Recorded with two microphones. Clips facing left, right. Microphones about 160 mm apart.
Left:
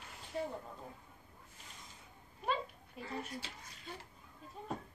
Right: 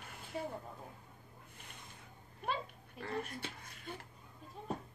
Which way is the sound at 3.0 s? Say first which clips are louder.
Right 2 dB; 60° right (ahead or behind).